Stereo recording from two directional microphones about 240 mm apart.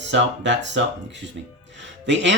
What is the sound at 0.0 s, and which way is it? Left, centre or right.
Speech, right.